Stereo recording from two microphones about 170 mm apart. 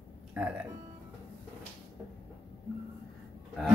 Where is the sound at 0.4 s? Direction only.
5° right (ahead or behind).